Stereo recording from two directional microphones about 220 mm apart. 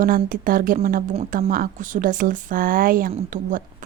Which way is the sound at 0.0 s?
40° right (ahead or behind).